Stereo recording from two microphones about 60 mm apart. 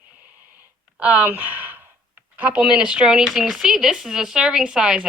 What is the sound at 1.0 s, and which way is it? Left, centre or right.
Speech, right.